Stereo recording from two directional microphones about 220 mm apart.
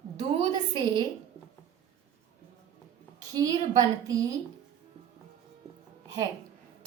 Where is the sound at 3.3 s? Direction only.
15° right (ahead or behind).